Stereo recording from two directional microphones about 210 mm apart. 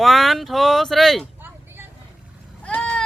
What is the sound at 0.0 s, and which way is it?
Speech, centre (ahead or behind).